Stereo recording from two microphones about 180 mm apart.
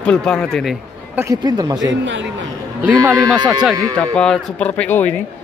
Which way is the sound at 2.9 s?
20° right (ahead or behind).